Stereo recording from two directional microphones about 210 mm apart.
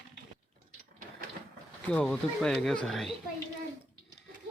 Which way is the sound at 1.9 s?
5° left (ahead or behind).